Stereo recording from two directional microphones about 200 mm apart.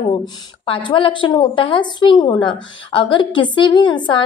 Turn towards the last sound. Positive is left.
turn(degrees=25)  # may be behind; listen again after turning